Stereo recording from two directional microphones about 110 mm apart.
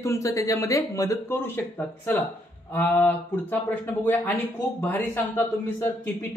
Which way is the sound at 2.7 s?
15° left (ahead or behind).